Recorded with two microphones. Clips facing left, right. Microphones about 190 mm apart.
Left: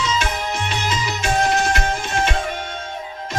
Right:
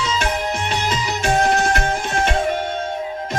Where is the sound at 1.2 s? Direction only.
55° right (ahead or behind).